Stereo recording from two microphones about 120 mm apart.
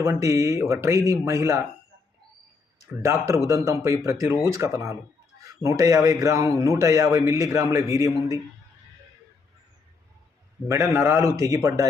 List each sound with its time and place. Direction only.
0.0 s speech: 25° right (ahead or behind)
2.8 s speech: 25° right (ahead or behind)
10.7 s speech: 20° right (ahead or behind)